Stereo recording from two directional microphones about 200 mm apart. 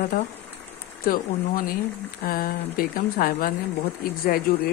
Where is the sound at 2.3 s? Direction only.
45° left (ahead or behind).